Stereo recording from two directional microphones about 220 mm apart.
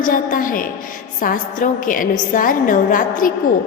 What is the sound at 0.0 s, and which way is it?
A woman's voice, 40° left (ahead or behind).